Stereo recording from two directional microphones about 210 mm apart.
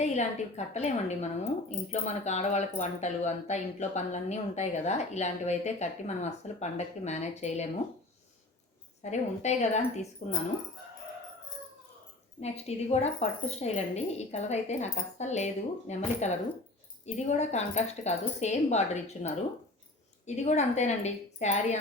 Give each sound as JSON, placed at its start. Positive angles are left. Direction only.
{"t": 0.0, "sound": "speech", "side_deg": 35}
{"t": 9.0, "sound": "speech", "side_deg": 35}
{"t": 12.4, "sound": "speech", "side_deg": 30}